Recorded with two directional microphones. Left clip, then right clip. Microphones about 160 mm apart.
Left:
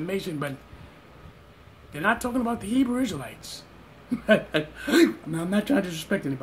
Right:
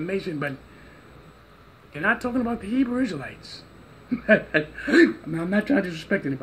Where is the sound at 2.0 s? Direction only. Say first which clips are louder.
Right 1 dB; 20° left (ahead or behind).